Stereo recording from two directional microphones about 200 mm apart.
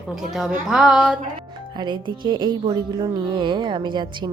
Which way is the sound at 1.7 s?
20° right (ahead or behind).